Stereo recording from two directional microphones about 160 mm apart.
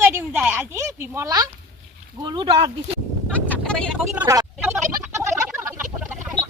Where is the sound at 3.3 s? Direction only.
5° left (ahead or behind).